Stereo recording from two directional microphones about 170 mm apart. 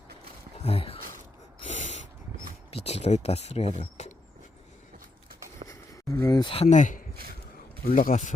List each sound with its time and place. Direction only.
0.6 s speech: 35° left (ahead or behind)
1.6 s gasp: 45° left (ahead or behind)
2.6 s speech: 35° left (ahead or behind)
3.8 s a sound: 45° left (ahead or behind)
5.6 s a sound: 20° left (ahead or behind); by 7.0 s 45° left (ahead or behind)
7.9 s speech: 50° left (ahead or behind)